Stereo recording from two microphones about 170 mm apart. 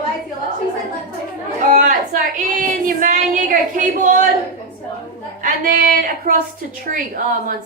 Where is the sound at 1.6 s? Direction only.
50° right (ahead or behind).